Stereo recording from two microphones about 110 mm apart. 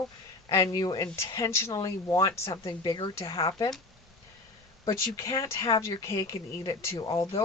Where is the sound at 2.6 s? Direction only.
40° left (ahead or behind).